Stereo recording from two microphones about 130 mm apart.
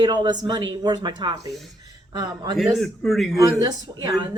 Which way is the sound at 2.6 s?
Centre (ahead or behind).